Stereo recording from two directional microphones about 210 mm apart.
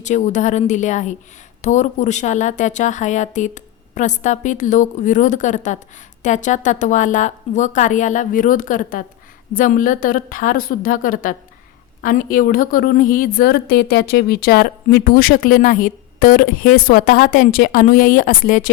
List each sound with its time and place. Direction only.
0.0 s a woman's voice: 35° left (ahead or behind)